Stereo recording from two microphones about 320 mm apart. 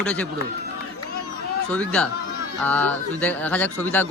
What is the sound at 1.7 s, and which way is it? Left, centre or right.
Speech, centre.